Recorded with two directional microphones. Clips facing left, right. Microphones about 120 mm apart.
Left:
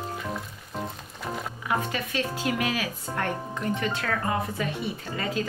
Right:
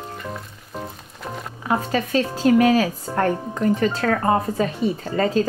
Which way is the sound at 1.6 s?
35° right (ahead or behind).